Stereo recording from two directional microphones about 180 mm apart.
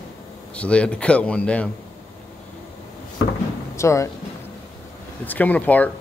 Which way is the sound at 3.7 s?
15° left (ahead or behind).